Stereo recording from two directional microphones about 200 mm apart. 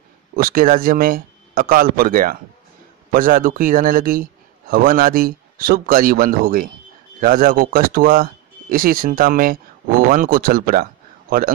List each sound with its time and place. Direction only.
0.4 s a man's voice: 45° right (ahead or behind)